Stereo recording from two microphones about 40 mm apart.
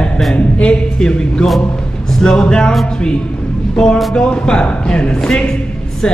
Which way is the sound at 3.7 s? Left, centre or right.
Centre.